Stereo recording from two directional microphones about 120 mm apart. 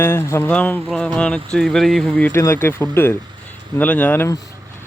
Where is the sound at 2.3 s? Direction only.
20° left (ahead or behind).